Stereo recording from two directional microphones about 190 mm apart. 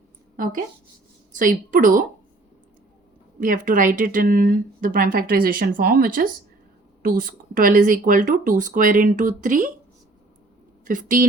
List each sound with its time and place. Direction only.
1.3 s speech: 45° right (ahead or behind)
3.4 s speech: 45° right (ahead or behind)
10.8 s speech: 45° right (ahead or behind)